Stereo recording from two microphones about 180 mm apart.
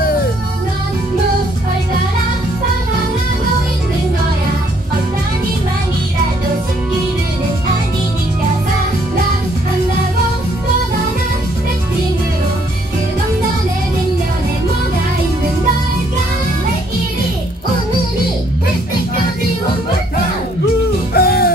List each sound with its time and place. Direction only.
21.1 s music: 55° left (ahead or behind)